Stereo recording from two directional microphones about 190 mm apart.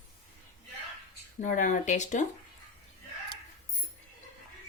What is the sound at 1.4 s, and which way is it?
Speech, 45° left (ahead or behind).